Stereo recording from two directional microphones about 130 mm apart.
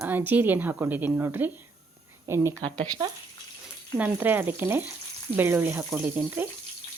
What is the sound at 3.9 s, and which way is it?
Speech, 10° right (ahead or behind).